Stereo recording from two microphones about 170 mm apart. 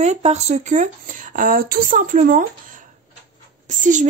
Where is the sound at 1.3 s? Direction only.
55° right (ahead or behind).